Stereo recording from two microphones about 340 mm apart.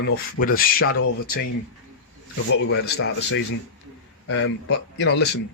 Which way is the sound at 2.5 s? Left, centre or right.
Left.